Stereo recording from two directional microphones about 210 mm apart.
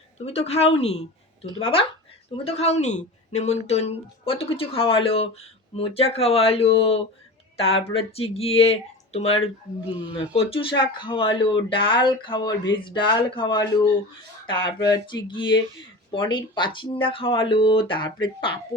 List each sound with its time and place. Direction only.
0.3 s speech: 30° left (ahead or behind)